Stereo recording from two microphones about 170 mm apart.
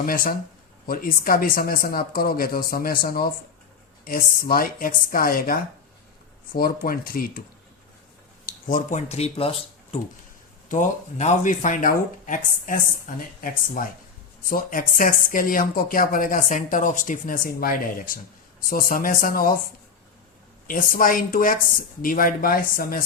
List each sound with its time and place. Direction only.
0.0 s speech: 60° left (ahead or behind)
8.4 s speech: 50° left (ahead or behind); by 10.0 s 35° left (ahead or behind)
10.7 s speech: 45° left (ahead or behind)
20.7 s speech: 55° left (ahead or behind)